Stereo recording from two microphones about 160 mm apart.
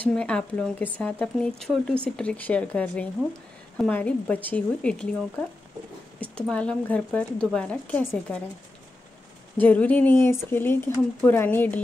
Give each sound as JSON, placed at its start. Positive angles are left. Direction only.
{"t": 0.0, "sound": "speech", "side_deg": 5}
{"t": 6.2, "sound": "speech", "side_deg": 5}
{"t": 9.6, "sound": "speech", "side_deg": 10}